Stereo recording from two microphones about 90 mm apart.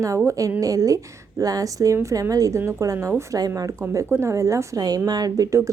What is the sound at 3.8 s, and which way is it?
Speech, 30° right (ahead or behind).